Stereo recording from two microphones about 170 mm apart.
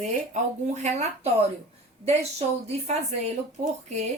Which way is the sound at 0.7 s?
40° right (ahead or behind).